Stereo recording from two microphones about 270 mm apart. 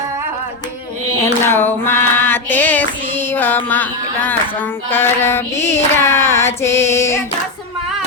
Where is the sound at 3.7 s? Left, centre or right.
Centre.